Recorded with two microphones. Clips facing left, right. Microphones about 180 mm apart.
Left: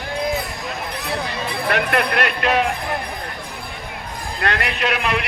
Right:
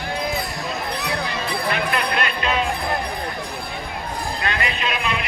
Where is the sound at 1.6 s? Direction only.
65° left (ahead or behind).